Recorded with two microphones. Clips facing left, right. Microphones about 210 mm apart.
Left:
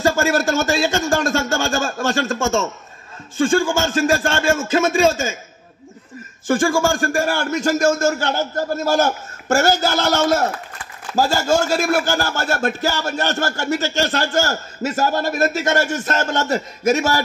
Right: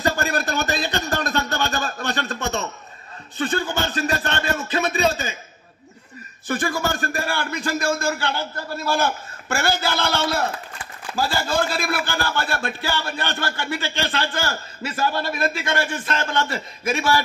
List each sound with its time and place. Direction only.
0.0 s a man's voice: 45° left (ahead or behind)
6.4 s a man's voice: 45° left (ahead or behind)